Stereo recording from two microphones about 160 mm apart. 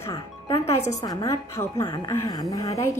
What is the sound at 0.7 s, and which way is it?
A woman's voice, 20° left (ahead or behind).